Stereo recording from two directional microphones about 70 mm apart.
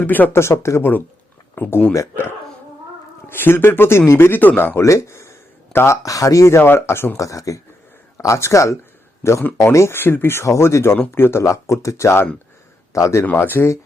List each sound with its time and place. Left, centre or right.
0.0 s speech: left
0.3 s speech: left
1.5 s speech: left
3.2 s speech: left
4.8 s a sound: left
6.0 s speech: left
6.6 s speech: left
7.2 s speech: left
9.7 s speech: left
10.4 s speech: left
10.9 s speech: left
13.2 s speech: left